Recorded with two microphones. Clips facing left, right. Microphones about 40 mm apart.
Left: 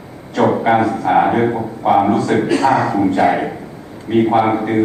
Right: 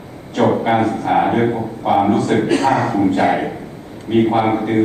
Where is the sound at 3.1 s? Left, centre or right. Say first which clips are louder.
Left 2 dB; right.